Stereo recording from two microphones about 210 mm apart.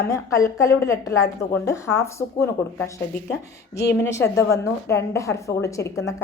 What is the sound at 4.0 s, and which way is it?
A woman's voice, 15° left (ahead or behind).